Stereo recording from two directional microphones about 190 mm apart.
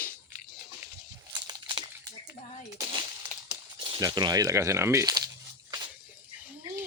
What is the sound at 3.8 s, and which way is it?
Speech, 20° right (ahead or behind).